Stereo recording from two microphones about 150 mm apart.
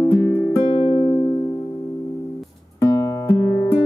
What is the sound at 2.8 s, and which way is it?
Music, 20° left (ahead or behind).